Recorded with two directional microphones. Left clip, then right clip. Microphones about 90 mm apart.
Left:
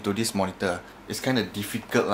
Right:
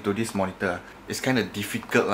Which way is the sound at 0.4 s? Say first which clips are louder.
Left 1 dB; 25° left (ahead or behind).